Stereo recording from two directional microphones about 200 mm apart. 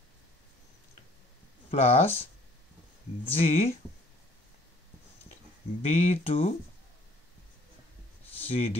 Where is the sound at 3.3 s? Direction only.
30° left (ahead or behind).